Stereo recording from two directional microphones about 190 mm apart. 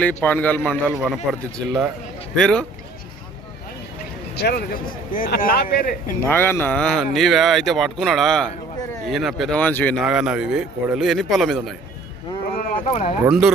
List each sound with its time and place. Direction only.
0.0 s a man's voice: 10° left (ahead or behind)
4.4 s speech: 55° left (ahead or behind)
6.2 s speech: 10° left (ahead or behind)
12.5 s a sound: 40° left (ahead or behind)
13.2 s speech: 5° right (ahead or behind)